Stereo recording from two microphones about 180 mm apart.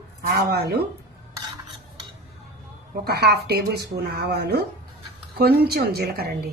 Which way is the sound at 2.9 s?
65° right (ahead or behind).